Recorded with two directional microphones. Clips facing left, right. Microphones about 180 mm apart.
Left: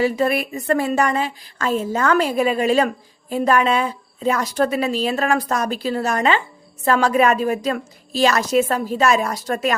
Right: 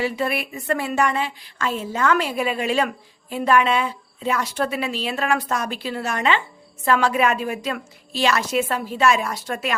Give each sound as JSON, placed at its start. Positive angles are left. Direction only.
{"t": 0.0, "sound": "speech", "side_deg": 40}